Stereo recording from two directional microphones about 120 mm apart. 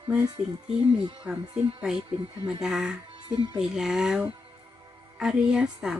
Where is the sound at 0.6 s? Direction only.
50° right (ahead or behind).